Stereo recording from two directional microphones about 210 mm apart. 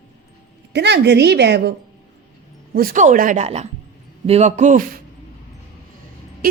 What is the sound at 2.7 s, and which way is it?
Speech, 40° right (ahead or behind).